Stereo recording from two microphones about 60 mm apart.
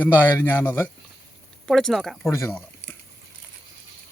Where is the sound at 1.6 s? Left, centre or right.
Centre.